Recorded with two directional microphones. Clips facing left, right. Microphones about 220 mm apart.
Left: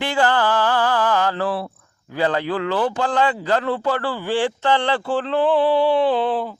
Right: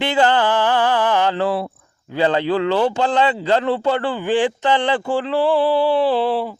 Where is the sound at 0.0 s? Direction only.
20° right (ahead or behind).